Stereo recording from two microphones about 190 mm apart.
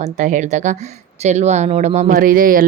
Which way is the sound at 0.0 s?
40° right (ahead or behind).